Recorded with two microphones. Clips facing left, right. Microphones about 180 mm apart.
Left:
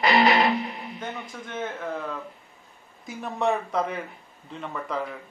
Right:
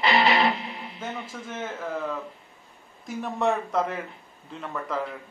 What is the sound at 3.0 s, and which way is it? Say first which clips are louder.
Speech: right 1 dB; centre (ahead or behind).